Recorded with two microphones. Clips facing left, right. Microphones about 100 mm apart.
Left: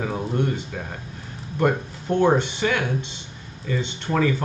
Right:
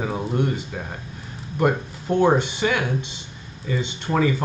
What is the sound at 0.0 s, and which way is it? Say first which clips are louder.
Speech: right 1 dB; 10° right (ahead or behind).